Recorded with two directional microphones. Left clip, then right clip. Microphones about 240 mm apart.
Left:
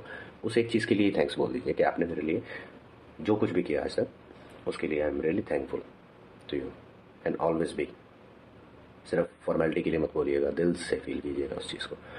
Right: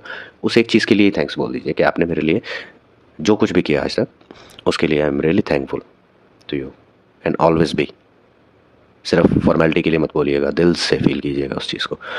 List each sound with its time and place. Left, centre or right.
0.0 s speech: right
4.6 s speech: right
6.5 s speech: right
7.2 s speech: right
9.1 s speech: right